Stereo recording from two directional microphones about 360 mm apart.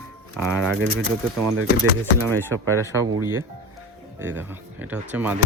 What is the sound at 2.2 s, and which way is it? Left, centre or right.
Speech, centre.